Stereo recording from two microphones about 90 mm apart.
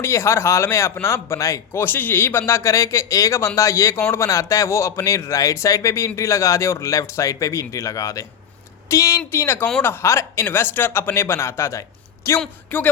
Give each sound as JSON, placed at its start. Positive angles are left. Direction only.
{"t": 0.0, "sound": "a man's voice", "side_deg": 30}
{"t": 1.8, "sound": "a man's voice", "side_deg": 25}
{"t": 12.7, "sound": "speech", "side_deg": 20}